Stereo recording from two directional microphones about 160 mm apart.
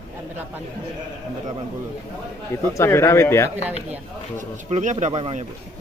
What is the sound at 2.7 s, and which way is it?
Speech, 15° left (ahead or behind).